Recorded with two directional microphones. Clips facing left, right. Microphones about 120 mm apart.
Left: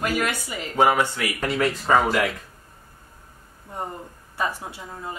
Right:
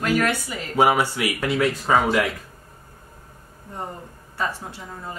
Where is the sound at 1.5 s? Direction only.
Centre (ahead or behind).